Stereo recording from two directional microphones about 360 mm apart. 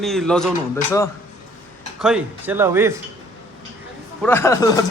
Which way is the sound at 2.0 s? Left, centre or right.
Centre.